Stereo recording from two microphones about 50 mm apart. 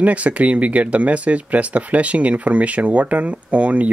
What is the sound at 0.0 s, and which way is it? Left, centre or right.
Speech, right.